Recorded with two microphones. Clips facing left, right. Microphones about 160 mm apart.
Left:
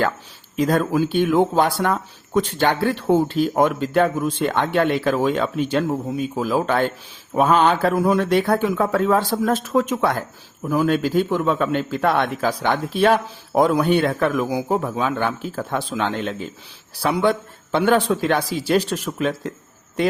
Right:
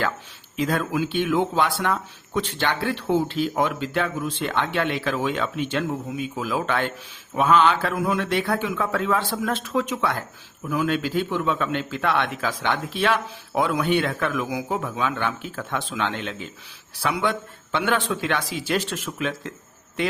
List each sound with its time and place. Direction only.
0.5 s a man's voice: 40° left (ahead or behind)